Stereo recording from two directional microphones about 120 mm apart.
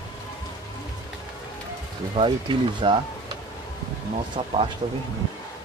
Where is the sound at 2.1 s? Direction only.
45° right (ahead or behind).